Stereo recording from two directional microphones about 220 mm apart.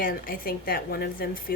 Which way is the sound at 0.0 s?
40° left (ahead or behind).